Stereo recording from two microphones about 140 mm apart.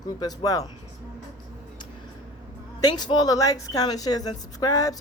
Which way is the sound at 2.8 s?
30° left (ahead or behind).